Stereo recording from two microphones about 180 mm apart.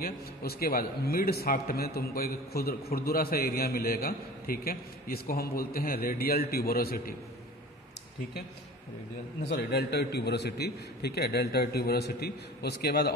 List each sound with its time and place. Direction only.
0.0 s a man's voice: 55° left (ahead or behind)
9.5 s a man's voice: 65° left (ahead or behind)